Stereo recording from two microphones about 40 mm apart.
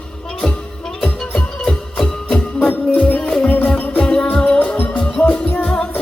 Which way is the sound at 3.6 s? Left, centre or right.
Left.